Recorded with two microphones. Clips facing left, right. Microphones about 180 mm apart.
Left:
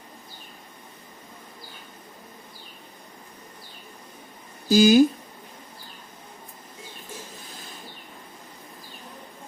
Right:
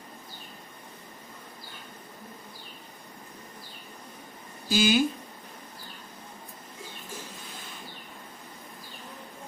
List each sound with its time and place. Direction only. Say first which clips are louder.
4.7 s speech: left 8 dB; 40° left (ahead or behind)